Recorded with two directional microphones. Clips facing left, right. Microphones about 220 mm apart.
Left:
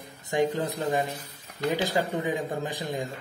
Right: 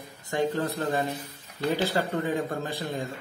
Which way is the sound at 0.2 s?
15° left (ahead or behind).